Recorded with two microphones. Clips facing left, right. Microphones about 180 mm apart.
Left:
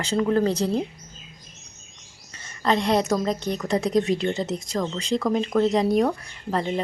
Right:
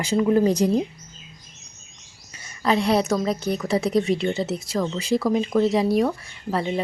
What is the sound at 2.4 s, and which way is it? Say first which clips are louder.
Speech: right 1 dB; 5° right (ahead or behind).